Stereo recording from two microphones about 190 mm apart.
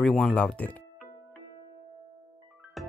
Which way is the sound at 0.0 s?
Centre (ahead or behind).